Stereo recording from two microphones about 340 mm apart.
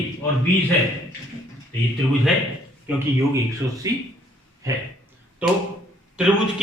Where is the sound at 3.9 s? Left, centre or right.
Centre.